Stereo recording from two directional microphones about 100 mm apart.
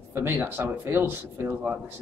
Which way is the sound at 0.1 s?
20° right (ahead or behind).